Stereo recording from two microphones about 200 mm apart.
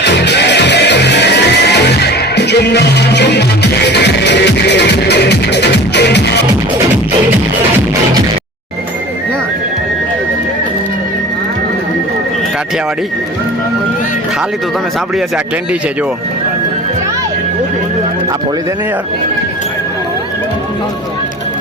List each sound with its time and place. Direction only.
0.0 s music: 60° left (ahead or behind)